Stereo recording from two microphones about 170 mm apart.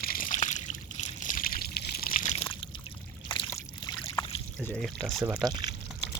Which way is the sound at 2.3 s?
30° left (ahead or behind).